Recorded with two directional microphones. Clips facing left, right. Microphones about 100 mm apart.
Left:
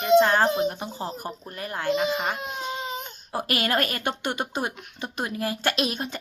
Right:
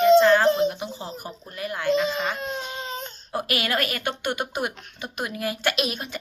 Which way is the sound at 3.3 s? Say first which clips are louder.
Even; 35° left (ahead or behind).